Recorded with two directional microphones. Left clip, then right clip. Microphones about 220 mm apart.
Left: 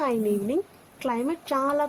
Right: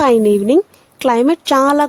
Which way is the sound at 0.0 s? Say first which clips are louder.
Right 14 dB; 50° right (ahead or behind).